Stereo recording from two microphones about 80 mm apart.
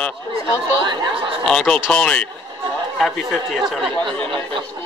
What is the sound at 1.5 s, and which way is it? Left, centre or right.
Speech, centre.